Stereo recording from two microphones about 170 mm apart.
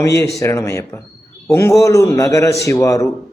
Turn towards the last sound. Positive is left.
turn(degrees=20)  # may be behind; listen again after turning